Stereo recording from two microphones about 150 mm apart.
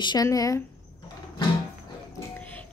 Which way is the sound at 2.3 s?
10° left (ahead or behind).